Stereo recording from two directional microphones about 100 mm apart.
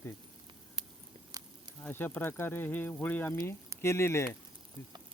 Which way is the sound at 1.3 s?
35° right (ahead or behind).